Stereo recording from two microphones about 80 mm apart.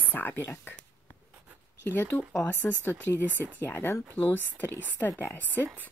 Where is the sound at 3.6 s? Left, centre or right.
Left.